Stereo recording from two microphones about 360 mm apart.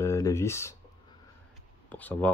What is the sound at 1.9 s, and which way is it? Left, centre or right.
Speech, centre.